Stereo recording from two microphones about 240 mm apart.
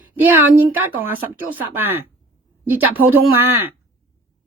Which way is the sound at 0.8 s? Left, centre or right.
Right.